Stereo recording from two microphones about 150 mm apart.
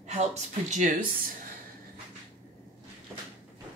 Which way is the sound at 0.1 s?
50° right (ahead or behind).